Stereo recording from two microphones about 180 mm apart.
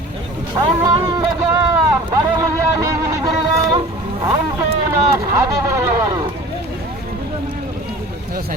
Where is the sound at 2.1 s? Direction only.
15° right (ahead or behind).